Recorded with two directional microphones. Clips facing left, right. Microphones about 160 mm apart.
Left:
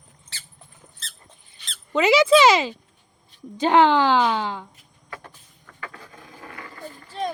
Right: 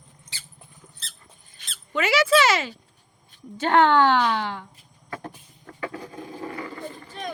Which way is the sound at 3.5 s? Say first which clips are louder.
Left 1 dB; 15° left (ahead or behind).